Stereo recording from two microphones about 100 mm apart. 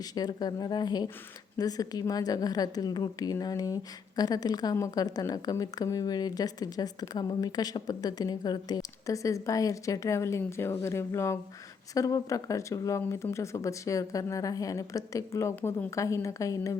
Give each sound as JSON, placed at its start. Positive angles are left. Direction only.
{"t": 0.0, "sound": "a woman's voice", "side_deg": 40}